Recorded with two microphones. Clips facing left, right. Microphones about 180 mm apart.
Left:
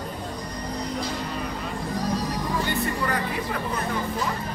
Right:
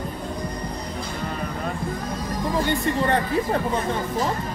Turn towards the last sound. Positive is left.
turn(degrees=-30)  # may be behind; listen again after turning